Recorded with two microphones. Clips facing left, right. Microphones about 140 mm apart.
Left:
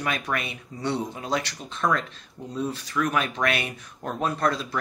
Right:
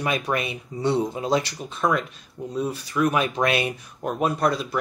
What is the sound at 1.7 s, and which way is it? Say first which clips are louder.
Speech: left 1 dB; 10° right (ahead or behind).